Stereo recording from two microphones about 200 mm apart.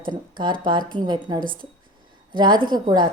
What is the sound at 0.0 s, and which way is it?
A woman's voice, 20° right (ahead or behind).